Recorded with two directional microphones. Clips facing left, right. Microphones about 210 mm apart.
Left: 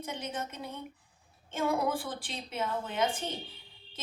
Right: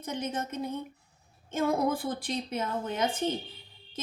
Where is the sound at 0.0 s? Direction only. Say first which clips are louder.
Right 4 dB; 40° right (ahead or behind).